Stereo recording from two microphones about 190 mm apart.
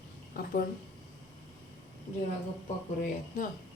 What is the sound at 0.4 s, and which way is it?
Speech, 50° left (ahead or behind).